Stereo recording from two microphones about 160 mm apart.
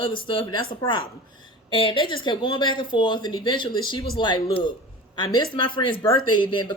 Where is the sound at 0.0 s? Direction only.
30° left (ahead or behind).